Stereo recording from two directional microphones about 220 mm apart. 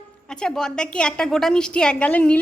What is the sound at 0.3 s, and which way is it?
A woman's voice, 5° left (ahead or behind).